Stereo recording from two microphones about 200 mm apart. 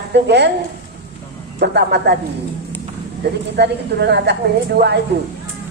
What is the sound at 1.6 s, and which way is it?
Speech, 55° right (ahead or behind).